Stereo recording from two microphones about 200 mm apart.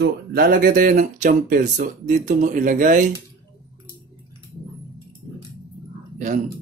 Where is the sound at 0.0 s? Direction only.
50° right (ahead or behind).